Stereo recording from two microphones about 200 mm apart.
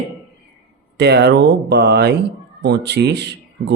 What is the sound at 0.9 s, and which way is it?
Speech, 55° right (ahead or behind).